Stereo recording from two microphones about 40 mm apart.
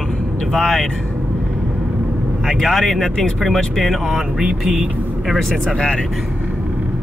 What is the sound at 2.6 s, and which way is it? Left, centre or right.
Speech, centre.